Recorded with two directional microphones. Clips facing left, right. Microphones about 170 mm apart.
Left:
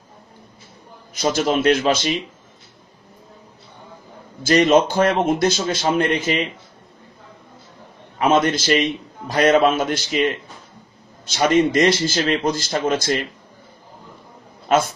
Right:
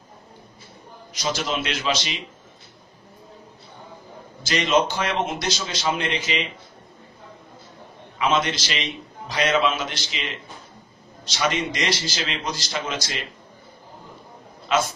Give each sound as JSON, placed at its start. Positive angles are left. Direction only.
{"t": 1.1, "sound": "a man's voice", "side_deg": 50}
{"t": 4.4, "sound": "a man's voice", "side_deg": 50}
{"t": 8.2, "sound": "a man's voice", "side_deg": 50}